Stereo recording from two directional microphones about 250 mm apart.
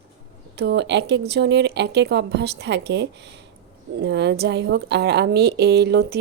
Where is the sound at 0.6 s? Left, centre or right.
Right.